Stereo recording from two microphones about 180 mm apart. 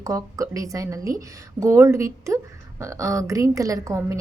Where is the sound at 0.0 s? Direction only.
20° right (ahead or behind).